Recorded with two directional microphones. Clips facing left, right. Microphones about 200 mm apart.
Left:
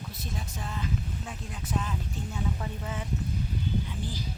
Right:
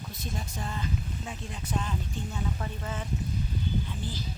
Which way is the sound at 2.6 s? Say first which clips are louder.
Even; 10° left (ahead or behind).